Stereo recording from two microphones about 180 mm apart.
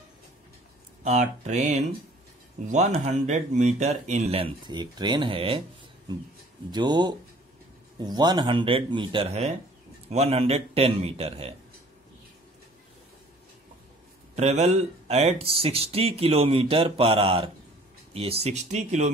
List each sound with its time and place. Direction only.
1.0 s speech: 40° right (ahead or behind)
6.7 s speech: 25° right (ahead or behind)
14.3 s speech: 40° right (ahead or behind)